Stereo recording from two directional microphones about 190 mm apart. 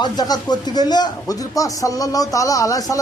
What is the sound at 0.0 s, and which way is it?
Speech, 20° left (ahead or behind).